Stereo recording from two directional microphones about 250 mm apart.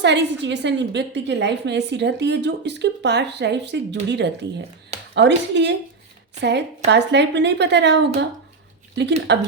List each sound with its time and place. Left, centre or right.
0.0 s a woman's voice: right
9.3 s a woman's voice: right